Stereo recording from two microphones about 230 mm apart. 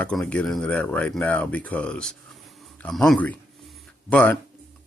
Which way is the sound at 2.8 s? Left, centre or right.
Centre.